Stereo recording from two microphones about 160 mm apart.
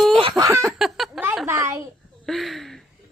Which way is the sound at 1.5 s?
20° right (ahead or behind).